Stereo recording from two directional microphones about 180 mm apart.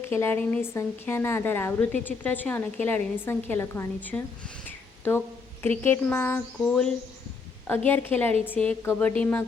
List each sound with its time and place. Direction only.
0.0 s a woman's voice: 10° left (ahead or behind)
4.6 s a sound: 10° left (ahead or behind)
5.8 s a woman's voice: 10° left (ahead or behind)